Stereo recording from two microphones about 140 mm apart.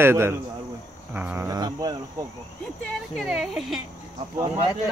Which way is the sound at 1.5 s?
30° right (ahead or behind).